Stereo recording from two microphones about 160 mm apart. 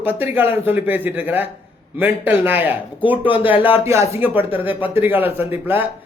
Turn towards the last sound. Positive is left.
turn(degrees=-10)  # may be behind; listen again after turning